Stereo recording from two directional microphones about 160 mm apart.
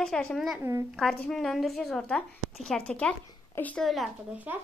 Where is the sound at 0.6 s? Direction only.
15° right (ahead or behind).